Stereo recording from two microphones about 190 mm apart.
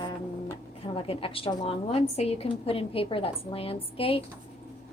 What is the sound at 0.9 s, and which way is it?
A woman's voice, 30° left (ahead or behind).